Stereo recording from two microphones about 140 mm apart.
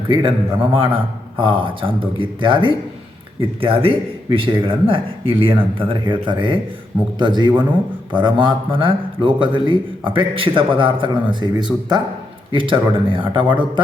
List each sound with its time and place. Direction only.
0.1 s a man's voice: 40° right (ahead or behind)